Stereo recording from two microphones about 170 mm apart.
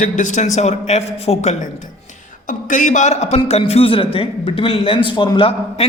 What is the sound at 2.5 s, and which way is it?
A man's voice, 50° left (ahead or behind).